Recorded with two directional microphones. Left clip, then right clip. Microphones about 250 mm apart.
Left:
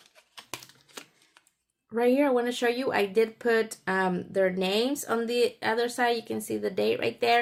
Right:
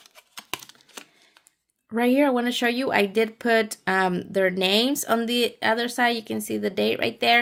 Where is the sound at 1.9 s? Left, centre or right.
Right.